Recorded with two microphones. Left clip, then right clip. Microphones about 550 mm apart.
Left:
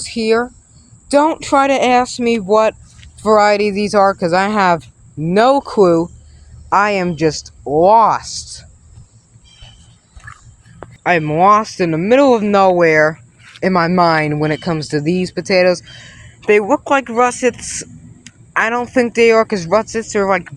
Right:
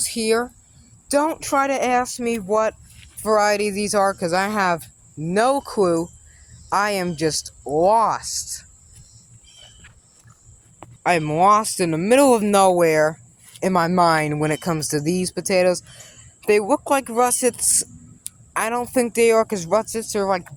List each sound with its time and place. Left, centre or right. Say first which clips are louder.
0.0 s speech: left 5 dB; right
11.0 s speech: left 5 dB; right